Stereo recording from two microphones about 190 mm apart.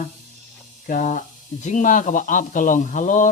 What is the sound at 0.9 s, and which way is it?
Speech, 45° left (ahead or behind).